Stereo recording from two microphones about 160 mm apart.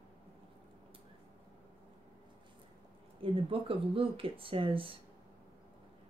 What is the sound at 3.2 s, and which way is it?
Speech, 35° right (ahead or behind).